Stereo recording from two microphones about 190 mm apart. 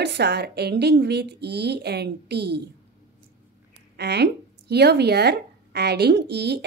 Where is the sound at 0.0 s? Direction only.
60° right (ahead or behind).